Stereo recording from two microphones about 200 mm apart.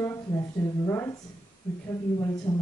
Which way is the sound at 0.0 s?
15° left (ahead or behind).